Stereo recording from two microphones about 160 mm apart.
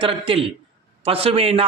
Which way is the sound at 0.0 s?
35° right (ahead or behind).